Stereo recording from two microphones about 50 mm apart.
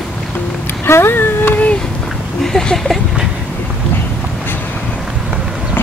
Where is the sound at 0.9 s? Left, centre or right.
Left.